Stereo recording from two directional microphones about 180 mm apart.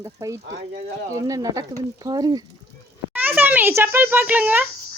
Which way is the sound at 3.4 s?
10° right (ahead or behind).